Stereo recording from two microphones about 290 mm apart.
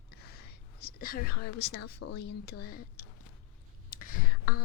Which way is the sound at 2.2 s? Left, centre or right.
Left.